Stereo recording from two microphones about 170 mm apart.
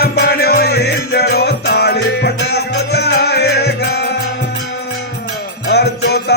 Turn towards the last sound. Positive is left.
turn(degrees=70)  # may be behind; listen again after turning